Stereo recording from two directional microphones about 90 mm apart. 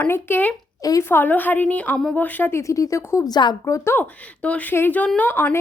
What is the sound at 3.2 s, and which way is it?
Speech, 50° left (ahead or behind).